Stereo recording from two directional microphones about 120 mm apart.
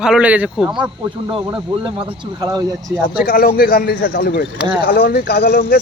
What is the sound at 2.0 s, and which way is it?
Speech, 45° right (ahead or behind).